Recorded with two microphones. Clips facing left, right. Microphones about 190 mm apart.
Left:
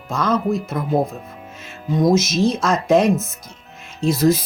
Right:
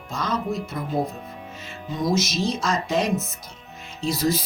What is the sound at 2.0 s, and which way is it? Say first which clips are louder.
Speech: left 7 dB; 50° left (ahead or behind).